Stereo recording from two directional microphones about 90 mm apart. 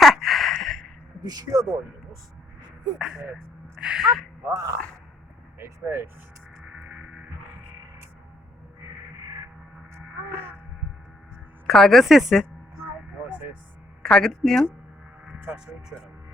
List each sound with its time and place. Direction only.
0.0 s gasp: centre (ahead or behind)
1.2 s speech: 45° right (ahead or behind)
3.8 s speech: 5° right (ahead or behind)
4.4 s speech: 35° right (ahead or behind)
6.6 s music: 20° right (ahead or behind)
9.9 s wail: 25° right (ahead or behind)
11.6 s speech: 5° left (ahead or behind)
12.8 s a sound: 20° right (ahead or behind)
14.0 s speech: 5° left (ahead or behind)
15.3 s speech: 10° right (ahead or behind)